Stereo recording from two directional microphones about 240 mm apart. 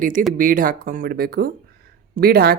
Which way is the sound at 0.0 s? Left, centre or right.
Right.